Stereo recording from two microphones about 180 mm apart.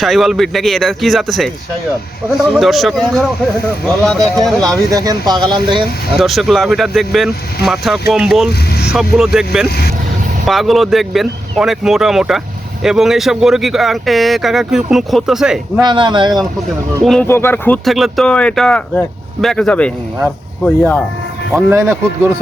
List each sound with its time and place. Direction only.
0.0 s speech: centre (ahead or behind)
4.9 s speech: 20° right (ahead or behind)
6.1 s speech: centre (ahead or behind)
9.6 s speech: 60° left (ahead or behind)
10.4 s speech: centre (ahead or behind)
15.8 s speech: 25° right (ahead or behind)
17.0 s speech: centre (ahead or behind)
17.2 s speech: 15° left (ahead or behind)
17.8 s speech: centre (ahead or behind)
21.7 s a man's voice: 15° right (ahead or behind)